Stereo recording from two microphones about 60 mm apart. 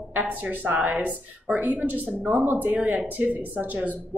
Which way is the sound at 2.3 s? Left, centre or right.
Right.